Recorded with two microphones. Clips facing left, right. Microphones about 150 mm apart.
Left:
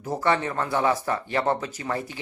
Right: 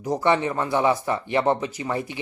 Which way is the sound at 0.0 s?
15° right (ahead or behind).